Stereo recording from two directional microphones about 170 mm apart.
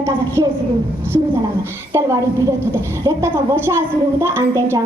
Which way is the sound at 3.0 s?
15° right (ahead or behind).